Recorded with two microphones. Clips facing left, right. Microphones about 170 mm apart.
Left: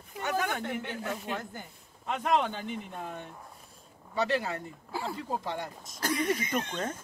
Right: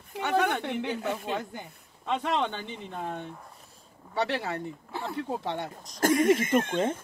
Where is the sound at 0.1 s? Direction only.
70° right (ahead or behind).